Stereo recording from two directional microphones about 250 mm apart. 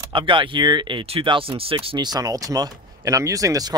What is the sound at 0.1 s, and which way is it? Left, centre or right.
Speech, centre.